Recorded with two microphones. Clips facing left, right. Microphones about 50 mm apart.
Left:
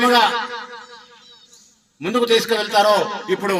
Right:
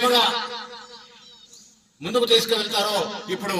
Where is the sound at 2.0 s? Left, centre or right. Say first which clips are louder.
Left 3 dB; left.